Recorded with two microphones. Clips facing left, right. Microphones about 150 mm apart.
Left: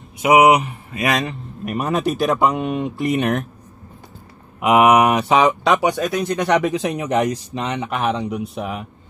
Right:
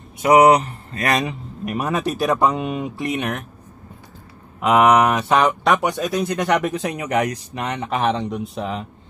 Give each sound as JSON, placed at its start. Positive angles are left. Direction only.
{"t": 0.2, "sound": "speech", "side_deg": 0}
{"t": 0.5, "sound": "speech", "side_deg": 15}
{"t": 1.2, "sound": "speech", "side_deg": 0}
{"t": 4.6, "sound": "speech", "side_deg": 10}
{"t": 5.3, "sound": "speech", "side_deg": 0}
{"t": 7.5, "sound": "speech", "side_deg": 25}
{"t": 7.8, "sound": "speech", "side_deg": 0}